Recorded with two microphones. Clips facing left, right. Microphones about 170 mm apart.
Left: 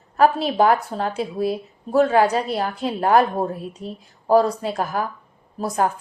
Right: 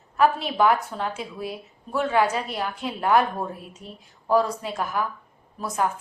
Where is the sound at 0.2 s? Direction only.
35° left (ahead or behind).